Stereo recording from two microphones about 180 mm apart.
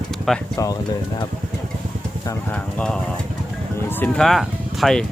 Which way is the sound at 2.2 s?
10° left (ahead or behind).